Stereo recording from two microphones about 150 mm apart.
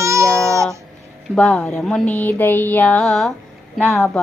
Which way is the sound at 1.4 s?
5° left (ahead or behind).